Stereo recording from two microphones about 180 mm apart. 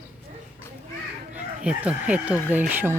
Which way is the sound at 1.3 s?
5° right (ahead or behind).